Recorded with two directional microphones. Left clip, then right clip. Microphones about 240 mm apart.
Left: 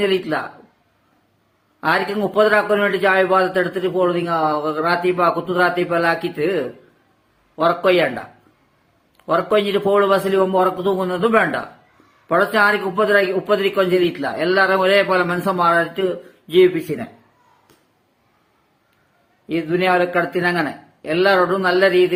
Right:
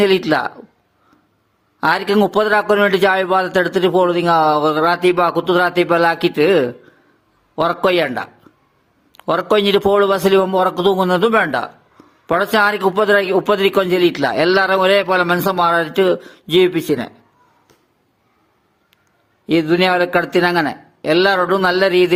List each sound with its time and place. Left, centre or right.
0.0 s a man's voice: right
1.8 s a man's voice: right
9.1 s a man's voice: right
19.5 s a man's voice: right